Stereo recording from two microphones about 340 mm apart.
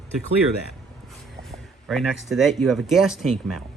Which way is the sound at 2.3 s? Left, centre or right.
Centre.